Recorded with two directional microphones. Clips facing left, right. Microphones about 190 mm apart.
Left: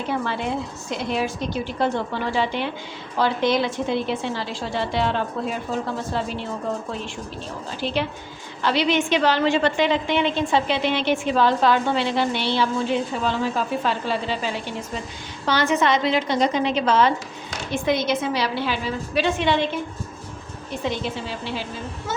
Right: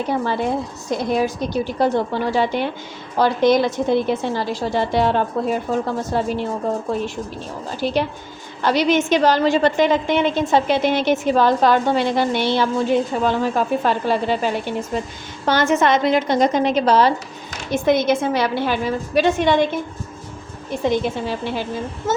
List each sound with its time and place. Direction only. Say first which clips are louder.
0.9 s a woman's voice: right 6 dB; 40° right (ahead or behind)
7.8 s a woman's voice: right 5 dB; 45° right (ahead or behind)
20.8 s a woman's voice: right 7 dB; 50° right (ahead or behind)